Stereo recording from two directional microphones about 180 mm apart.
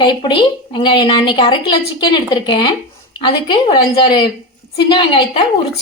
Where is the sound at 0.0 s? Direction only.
25° left (ahead or behind).